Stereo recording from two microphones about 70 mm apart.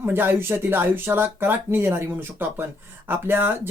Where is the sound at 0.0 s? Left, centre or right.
Right.